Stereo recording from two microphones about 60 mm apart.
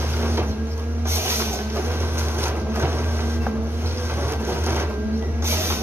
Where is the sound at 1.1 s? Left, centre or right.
Right.